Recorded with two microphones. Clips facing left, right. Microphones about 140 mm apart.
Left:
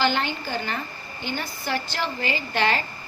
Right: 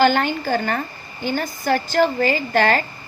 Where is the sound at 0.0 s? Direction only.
50° right (ahead or behind).